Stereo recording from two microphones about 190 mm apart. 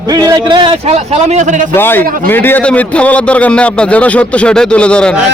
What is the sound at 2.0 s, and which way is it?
Speech, 50° right (ahead or behind).